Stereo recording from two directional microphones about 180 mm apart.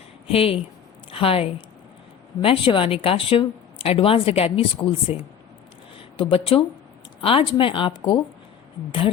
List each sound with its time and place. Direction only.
0.3 s a woman's voice: 30° left (ahead or behind)
6.3 s speech: 30° left (ahead or behind)